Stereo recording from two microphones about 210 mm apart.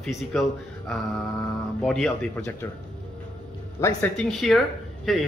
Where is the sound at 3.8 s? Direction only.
15° left (ahead or behind).